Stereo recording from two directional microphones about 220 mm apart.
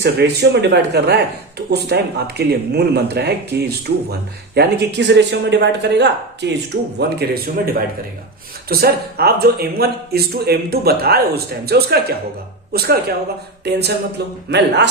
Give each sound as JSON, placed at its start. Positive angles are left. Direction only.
{"t": 0.0, "sound": "speech", "side_deg": -50}